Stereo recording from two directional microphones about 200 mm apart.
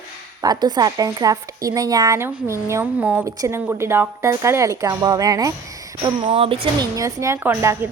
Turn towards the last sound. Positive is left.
turn(degrees=-10)  # may be behind; listen again after turning